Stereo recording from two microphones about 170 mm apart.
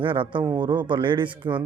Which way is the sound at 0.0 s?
30° right (ahead or behind).